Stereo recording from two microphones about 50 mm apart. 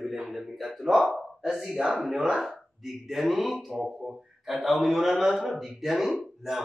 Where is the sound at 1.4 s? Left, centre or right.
Centre.